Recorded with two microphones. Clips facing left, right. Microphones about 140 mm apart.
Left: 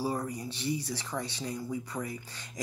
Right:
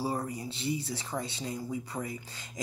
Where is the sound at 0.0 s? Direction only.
25° right (ahead or behind).